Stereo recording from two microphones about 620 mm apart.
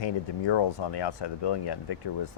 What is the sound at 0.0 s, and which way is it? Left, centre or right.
Speech, left.